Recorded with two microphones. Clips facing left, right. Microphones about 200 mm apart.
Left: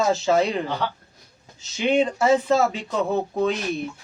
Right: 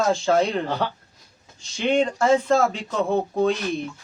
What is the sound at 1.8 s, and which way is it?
Speech, 5° left (ahead or behind).